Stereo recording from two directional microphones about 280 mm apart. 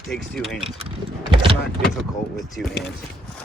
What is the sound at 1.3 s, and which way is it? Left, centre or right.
Speech, centre.